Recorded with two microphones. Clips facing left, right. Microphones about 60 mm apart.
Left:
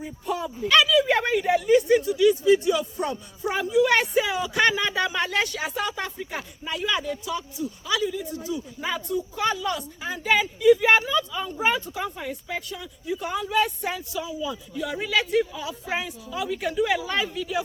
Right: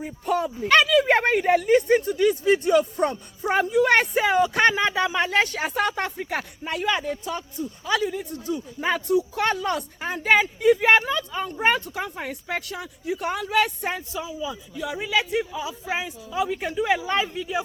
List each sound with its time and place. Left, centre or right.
0.0 s speech: right
5.7 s speech: right
9.0 s speech: right
14.2 s speech: centre